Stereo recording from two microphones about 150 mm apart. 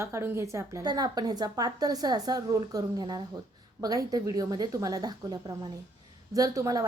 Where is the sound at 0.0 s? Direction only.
20° right (ahead or behind).